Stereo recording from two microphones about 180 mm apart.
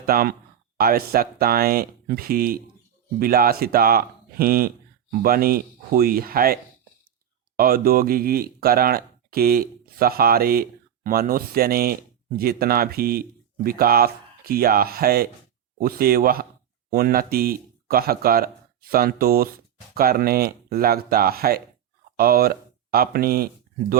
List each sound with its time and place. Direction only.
0.0 s speech: 55° right (ahead or behind)